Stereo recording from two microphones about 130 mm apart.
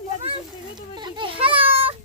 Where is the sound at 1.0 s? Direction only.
35° right (ahead or behind).